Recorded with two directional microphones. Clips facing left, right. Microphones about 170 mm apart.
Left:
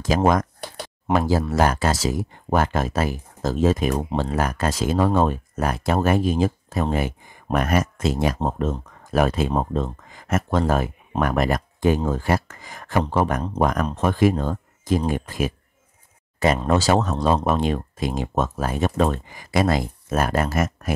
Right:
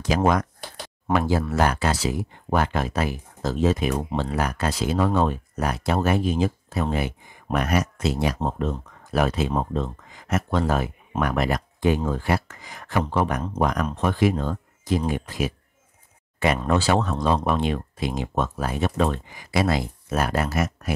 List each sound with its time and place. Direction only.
0.1 s speech: 45° left (ahead or behind)
16.6 s speech: 40° left (ahead or behind)